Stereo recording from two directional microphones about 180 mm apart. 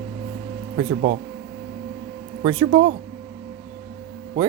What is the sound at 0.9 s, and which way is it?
Speech, 60° right (ahead or behind).